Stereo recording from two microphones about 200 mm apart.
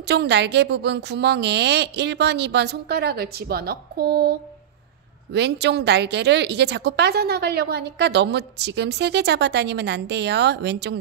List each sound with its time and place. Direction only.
0.0 s a woman's voice: 55° right (ahead or behind)